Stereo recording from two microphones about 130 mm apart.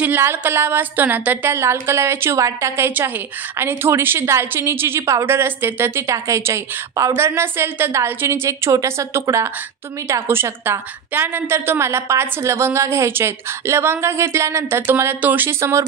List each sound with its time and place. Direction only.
0.0 s a woman's voice: 15° right (ahead or behind)